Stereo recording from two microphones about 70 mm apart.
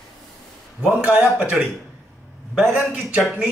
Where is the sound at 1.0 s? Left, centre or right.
Centre.